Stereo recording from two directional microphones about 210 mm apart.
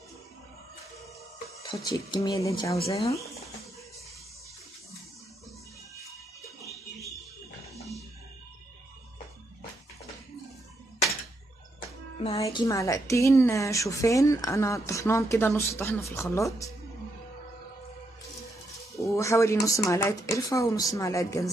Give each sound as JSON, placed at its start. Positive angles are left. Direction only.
{"t": 1.9, "sound": "speech", "side_deg": 20}
{"t": 2.9, "sound": "speech", "side_deg": 30}
{"t": 6.6, "sound": "music", "side_deg": 0}
{"t": 12.4, "sound": "a woman's voice", "side_deg": 15}
{"t": 18.9, "sound": "a woman's voice", "side_deg": 15}